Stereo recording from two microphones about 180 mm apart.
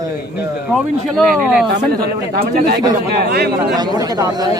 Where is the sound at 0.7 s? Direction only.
Centre (ahead or behind).